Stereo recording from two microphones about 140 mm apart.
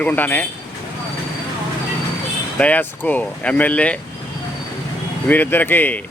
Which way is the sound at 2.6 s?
10° left (ahead or behind).